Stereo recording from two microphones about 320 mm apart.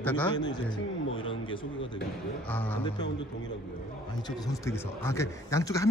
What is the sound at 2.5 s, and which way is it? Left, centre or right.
Speech, centre.